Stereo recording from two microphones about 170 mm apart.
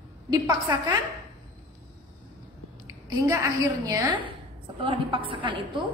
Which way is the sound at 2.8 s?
20° right (ahead or behind).